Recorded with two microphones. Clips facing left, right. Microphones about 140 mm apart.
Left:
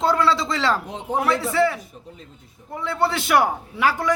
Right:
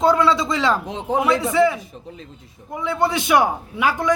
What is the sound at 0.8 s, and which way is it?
Speech, 90° right.